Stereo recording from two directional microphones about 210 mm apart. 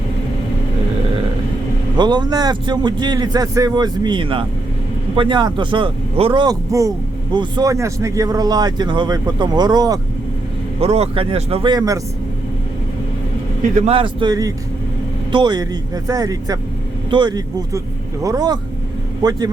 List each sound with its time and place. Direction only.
2.0 s speech: 20° right (ahead or behind)
10.8 s speech: 30° right (ahead or behind)
13.7 s speech: 30° right (ahead or behind)